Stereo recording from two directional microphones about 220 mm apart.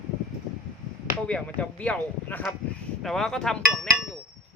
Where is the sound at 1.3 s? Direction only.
5° left (ahead or behind).